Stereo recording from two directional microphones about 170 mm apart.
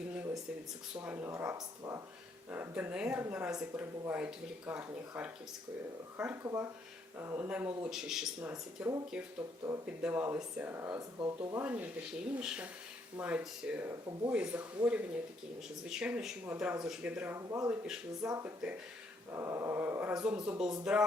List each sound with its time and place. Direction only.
1.0 s speech: 15° right (ahead or behind)